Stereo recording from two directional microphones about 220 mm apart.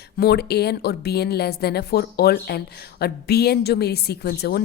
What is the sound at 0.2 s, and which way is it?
Speech, 45° left (ahead or behind).